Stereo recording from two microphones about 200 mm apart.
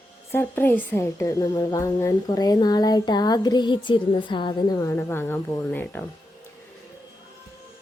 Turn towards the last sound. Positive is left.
turn(degrees=10)  # may be behind; listen again after turning